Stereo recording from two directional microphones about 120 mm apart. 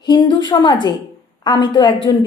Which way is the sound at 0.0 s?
40° left (ahead or behind).